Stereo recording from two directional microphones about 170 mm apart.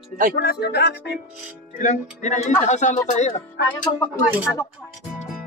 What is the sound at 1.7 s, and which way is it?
Speech, 45° left (ahead or behind).